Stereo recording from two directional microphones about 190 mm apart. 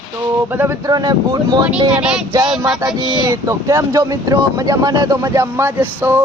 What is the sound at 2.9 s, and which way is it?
Speech, 25° right (ahead or behind).